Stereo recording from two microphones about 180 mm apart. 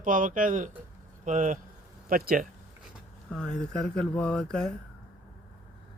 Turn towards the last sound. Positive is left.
turn(degrees=5)  # may be behind; listen again after turning